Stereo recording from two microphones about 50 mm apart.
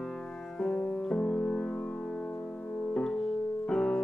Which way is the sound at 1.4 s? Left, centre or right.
Left.